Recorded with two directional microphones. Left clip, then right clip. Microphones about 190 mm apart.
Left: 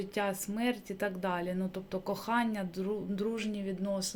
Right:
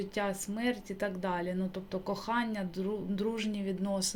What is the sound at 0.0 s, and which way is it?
Speech, 10° left (ahead or behind).